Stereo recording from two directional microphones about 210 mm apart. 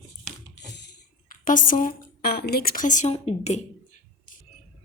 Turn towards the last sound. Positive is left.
turn(degrees=30)  # may be behind; listen again after turning